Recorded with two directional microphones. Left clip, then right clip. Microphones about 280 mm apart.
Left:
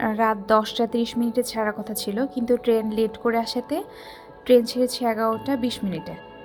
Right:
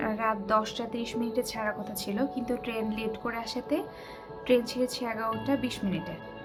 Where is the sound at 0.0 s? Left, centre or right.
Left.